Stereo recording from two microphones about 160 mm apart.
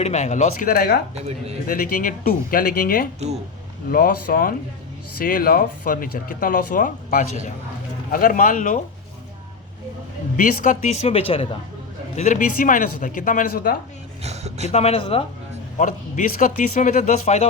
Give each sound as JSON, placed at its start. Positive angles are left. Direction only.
{"t": 0.0, "sound": "speech", "side_deg": 45}
{"t": 10.3, "sound": "speech", "side_deg": 55}
{"t": 12.1, "sound": "speech", "side_deg": 50}
{"t": 14.3, "sound": "speech", "side_deg": -40}
{"t": 14.7, "sound": "speech", "side_deg": 40}
{"t": 15.8, "sound": "speech", "side_deg": 50}